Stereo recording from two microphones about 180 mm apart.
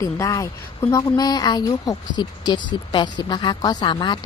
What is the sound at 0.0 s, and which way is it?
A woman's voice, 15° left (ahead or behind).